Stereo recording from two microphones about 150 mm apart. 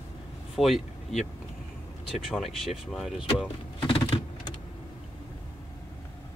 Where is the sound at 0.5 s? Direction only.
Centre (ahead or behind).